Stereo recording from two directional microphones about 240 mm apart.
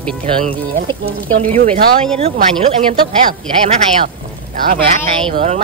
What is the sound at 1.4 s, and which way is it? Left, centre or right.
Speech, right.